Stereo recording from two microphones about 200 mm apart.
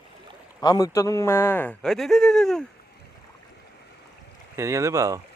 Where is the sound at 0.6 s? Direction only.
20° left (ahead or behind); by 2.6 s centre (ahead or behind).